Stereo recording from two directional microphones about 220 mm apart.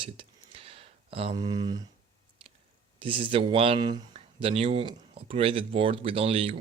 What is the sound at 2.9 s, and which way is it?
Speech, 25° right (ahead or behind).